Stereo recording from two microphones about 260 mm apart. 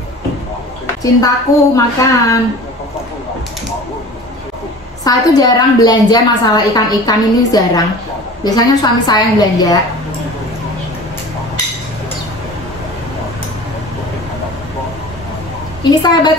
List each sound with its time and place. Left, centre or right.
1.5 s a woman's voice: centre
5.0 s a woman's voice: centre
15.8 s a woman's voice: centre